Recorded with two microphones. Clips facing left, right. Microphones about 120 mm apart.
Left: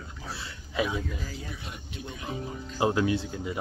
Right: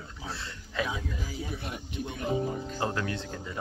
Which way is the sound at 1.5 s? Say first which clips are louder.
Right 4 dB; 55° right (ahead or behind).